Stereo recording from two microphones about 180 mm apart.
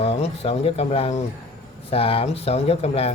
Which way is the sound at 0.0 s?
30° left (ahead or behind).